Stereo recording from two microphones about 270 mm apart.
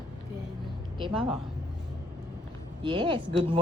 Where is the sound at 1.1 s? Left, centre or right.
Centre.